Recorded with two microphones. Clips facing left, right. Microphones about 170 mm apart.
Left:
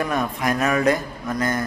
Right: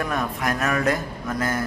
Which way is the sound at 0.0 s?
Centre (ahead or behind).